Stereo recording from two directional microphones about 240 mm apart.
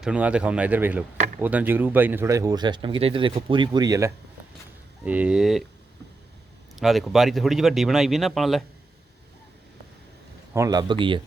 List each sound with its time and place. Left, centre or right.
0.0 s speech: centre
6.7 s speech: centre
10.5 s speech: centre